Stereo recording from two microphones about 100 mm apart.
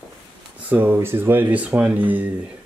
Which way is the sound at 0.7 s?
15° right (ahead or behind).